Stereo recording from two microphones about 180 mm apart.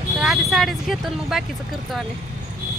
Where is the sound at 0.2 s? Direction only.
Centre (ahead or behind).